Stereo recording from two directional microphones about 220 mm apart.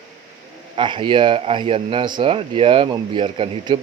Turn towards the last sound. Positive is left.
turn(degrees=-20)  # may be behind; listen again after turning